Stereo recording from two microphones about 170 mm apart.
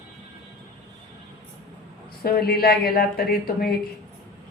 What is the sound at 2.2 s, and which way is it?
A woman's voice, 65° left (ahead or behind).